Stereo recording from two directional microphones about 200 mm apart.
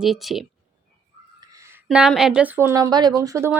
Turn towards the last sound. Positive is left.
turn(degrees=-15)  # may be behind; listen again after turning